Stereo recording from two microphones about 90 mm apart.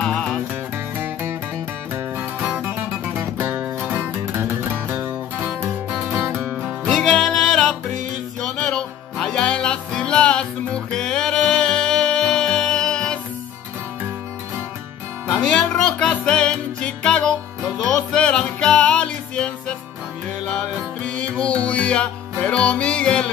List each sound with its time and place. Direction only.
0.0 s music: 10° left (ahead or behind)
3.3 s music: 25° right (ahead or behind)
6.8 s music: 5° left (ahead or behind)
15.4 s music: 10° left (ahead or behind)
21.0 s music: 15° left (ahead or behind)